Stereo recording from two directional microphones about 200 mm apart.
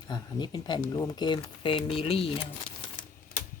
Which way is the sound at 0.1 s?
20° left (ahead or behind).